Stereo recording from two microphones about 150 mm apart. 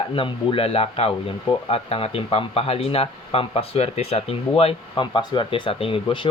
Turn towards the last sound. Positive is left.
turn(degrees=35)  # may be behind; listen again after turning